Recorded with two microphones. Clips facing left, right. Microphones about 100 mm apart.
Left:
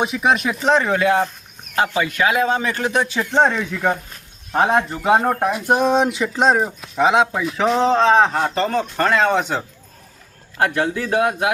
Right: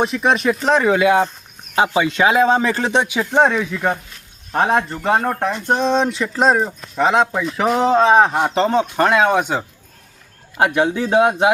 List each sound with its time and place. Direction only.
0.0 s speech: 5° left (ahead or behind); by 3.1 s 30° right (ahead or behind)
3.1 s speech: 10° right (ahead or behind); by 11.5 s 25° right (ahead or behind)